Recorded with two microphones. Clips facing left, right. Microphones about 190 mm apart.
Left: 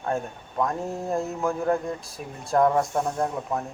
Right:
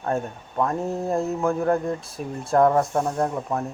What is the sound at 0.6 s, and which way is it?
Speech, centre (ahead or behind).